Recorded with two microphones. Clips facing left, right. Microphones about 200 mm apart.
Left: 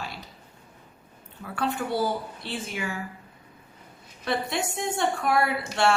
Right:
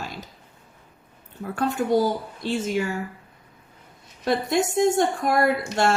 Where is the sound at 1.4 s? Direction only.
45° right (ahead or behind).